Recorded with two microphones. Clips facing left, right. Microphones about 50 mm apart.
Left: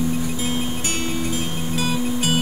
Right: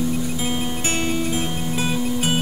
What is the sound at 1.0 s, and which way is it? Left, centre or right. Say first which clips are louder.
Music: right 3 dB; right.